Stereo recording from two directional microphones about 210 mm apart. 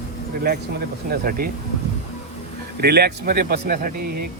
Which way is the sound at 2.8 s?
50° right (ahead or behind).